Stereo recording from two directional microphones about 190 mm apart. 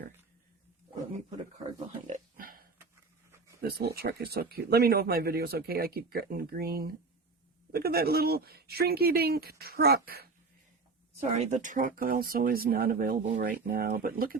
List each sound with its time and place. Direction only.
1.9 s a sound: 40° right (ahead or behind)
3.6 s speech: 55° right (ahead or behind)
11.3 s speech: 40° right (ahead or behind)